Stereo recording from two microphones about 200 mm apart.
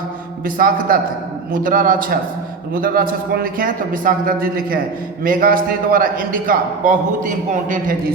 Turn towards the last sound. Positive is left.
turn(degrees=-40)  # may be behind; listen again after turning